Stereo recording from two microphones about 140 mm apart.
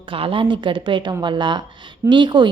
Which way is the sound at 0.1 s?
40° right (ahead or behind).